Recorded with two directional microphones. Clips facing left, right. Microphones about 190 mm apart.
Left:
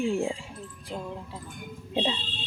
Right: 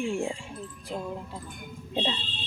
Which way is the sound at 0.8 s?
Centre (ahead or behind).